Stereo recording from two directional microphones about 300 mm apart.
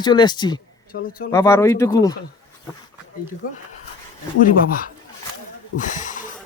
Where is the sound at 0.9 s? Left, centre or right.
Left.